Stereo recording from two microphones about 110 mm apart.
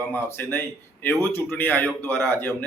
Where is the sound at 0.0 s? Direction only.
20° left (ahead or behind).